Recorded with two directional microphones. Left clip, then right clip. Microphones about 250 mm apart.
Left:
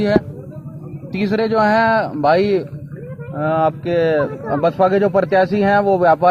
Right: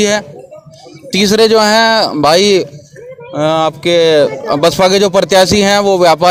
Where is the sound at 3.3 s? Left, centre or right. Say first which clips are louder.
Right 5 dB; right.